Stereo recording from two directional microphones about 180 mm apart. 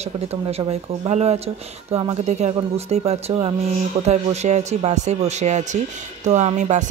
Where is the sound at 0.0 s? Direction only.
35° right (ahead or behind).